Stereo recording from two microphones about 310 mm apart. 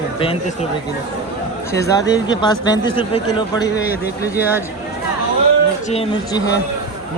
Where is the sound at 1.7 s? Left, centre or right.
Centre.